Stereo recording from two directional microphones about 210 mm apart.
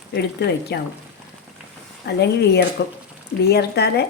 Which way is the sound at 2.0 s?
50° left (ahead or behind).